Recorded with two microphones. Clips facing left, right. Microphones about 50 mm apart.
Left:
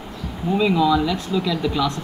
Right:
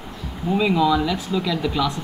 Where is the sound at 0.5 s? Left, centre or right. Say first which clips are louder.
Left 1 dB; centre.